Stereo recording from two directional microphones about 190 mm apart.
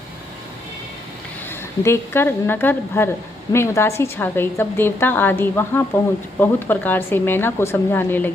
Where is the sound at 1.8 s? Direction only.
10° left (ahead or behind).